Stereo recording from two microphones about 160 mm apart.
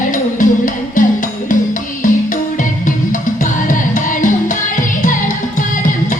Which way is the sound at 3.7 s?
55° left (ahead or behind).